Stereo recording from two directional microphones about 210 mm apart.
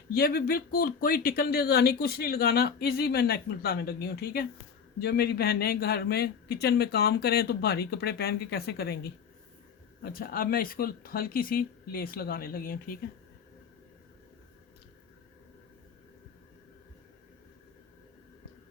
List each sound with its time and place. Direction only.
0.1 s speech: 45° left (ahead or behind)